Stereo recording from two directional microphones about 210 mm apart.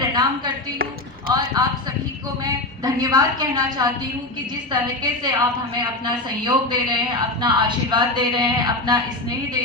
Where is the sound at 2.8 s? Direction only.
20° right (ahead or behind).